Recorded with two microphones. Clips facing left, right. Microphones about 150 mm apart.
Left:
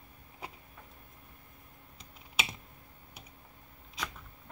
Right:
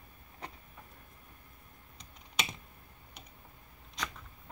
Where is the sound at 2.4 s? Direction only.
5° left (ahead or behind).